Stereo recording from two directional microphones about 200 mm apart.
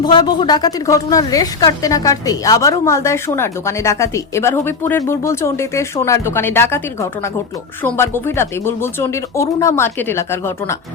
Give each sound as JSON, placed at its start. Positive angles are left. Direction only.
{"t": 0.0, "sound": "a woman's voice", "side_deg": 20}